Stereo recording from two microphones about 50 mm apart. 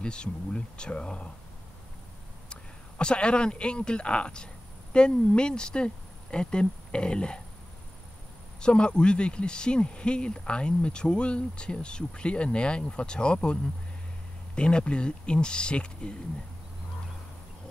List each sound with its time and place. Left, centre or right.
0.0 s speech: centre
2.5 s speech: centre
8.5 s speech: centre